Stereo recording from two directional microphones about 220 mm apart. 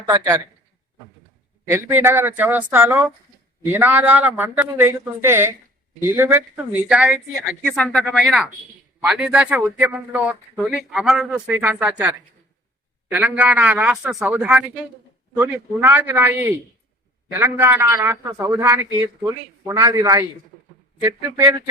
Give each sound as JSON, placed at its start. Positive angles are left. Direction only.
{"t": 0.0, "sound": "a man's voice", "side_deg": -15}
{"t": 1.6, "sound": "a man's voice", "side_deg": -10}